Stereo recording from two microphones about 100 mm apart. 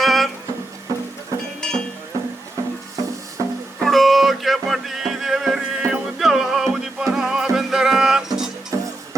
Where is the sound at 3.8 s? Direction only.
Centre (ahead or behind).